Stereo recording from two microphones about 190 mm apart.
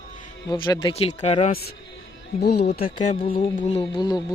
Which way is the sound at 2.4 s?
60° left (ahead or behind).